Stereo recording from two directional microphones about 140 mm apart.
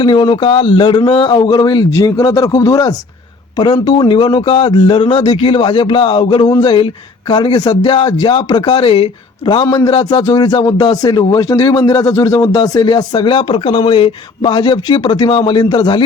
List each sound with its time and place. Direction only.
0.0 s speech: 35° left (ahead or behind)